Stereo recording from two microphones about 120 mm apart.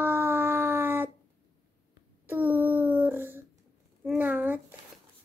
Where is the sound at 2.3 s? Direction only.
15° right (ahead or behind).